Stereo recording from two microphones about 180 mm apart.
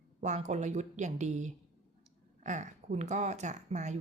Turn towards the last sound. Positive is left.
turn(degrees=-40)  # may be behind; listen again after turning